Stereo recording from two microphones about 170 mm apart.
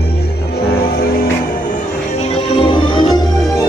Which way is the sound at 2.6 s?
30° left (ahead or behind).